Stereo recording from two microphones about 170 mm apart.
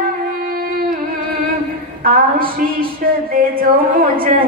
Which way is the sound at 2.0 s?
60° right (ahead or behind).